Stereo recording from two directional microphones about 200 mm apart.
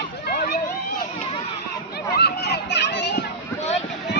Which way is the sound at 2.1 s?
55° left (ahead or behind).